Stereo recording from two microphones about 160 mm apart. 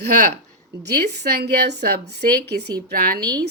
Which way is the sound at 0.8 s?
90° right.